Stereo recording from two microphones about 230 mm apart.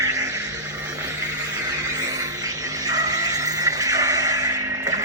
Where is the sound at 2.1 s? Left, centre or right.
Centre.